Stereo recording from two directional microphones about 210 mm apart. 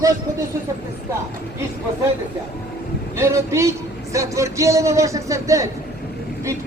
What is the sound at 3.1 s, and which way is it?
A man's voice, 15° right (ahead or behind).